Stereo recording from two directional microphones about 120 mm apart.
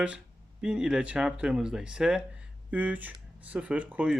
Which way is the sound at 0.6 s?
5° right (ahead or behind).